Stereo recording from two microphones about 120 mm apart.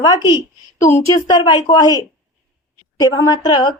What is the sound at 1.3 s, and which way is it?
Speech, 35° left (ahead or behind).